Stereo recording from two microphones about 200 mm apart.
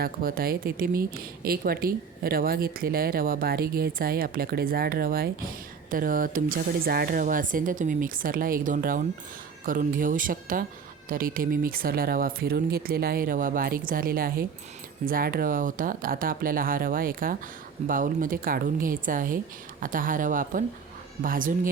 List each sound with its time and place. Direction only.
0.0 s speech: 45° right (ahead or behind)